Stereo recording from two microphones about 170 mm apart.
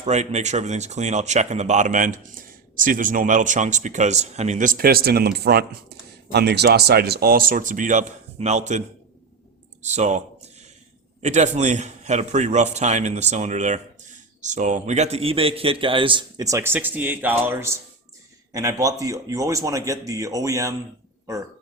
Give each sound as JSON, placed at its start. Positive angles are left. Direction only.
{"t": 0.0, "sound": "speech", "side_deg": -40}
{"t": 9.8, "sound": "a man's voice", "side_deg": -45}